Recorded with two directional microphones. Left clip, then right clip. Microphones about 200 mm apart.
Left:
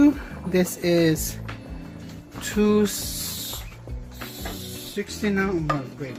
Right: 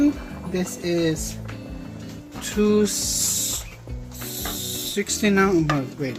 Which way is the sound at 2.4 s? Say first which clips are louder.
Right 1 dB; 25° left (ahead or behind).